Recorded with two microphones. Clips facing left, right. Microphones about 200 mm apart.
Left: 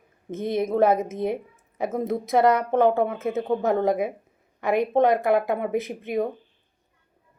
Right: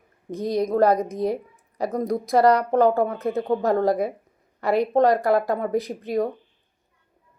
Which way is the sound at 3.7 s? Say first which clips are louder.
Right 1 dB; 20° left (ahead or behind).